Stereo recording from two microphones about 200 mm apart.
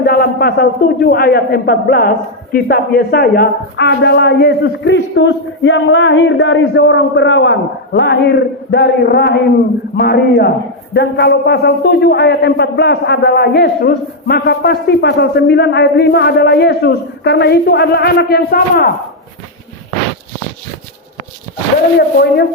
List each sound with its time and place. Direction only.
0.0 s a man's voice: 50° left (ahead or behind)
21.9 s a man's voice: 50° left (ahead or behind)